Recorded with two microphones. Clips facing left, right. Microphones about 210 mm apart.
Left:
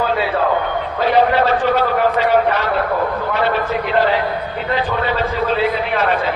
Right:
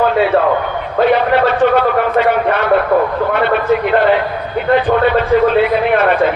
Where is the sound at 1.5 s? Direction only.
55° right (ahead or behind).